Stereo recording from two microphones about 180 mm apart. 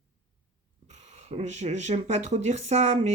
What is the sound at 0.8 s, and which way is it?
Speech, 40° right (ahead or behind).